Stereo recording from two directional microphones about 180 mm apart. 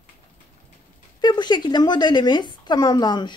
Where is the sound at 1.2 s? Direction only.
25° left (ahead or behind).